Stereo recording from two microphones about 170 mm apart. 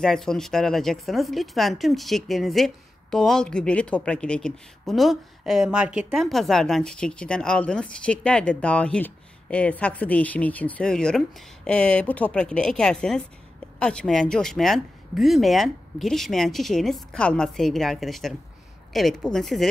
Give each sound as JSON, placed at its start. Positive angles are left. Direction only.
{"t": 0.0, "sound": "a woman's voice", "side_deg": 5}